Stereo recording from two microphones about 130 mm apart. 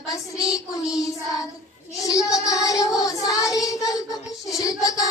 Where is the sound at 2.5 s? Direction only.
25° left (ahead or behind).